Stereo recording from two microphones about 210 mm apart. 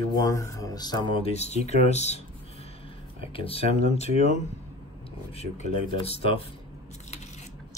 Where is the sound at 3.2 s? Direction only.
25° left (ahead or behind).